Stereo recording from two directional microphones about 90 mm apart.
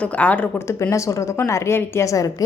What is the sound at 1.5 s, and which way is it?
Speech, 35° left (ahead or behind).